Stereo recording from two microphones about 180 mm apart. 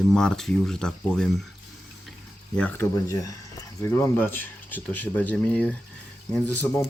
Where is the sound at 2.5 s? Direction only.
10° left (ahead or behind).